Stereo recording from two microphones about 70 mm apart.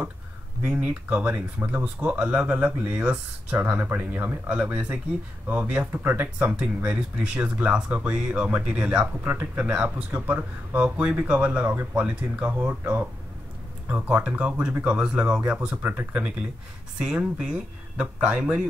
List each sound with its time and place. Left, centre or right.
0.7 s speech: centre
4.5 s speech: centre
9.0 s speech: right
12.5 s speech: right; by 18.7 s centre